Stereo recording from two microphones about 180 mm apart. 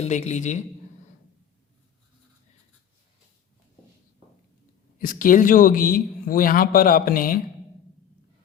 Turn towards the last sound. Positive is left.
turn(degrees=50)  # may be behind; listen again after turning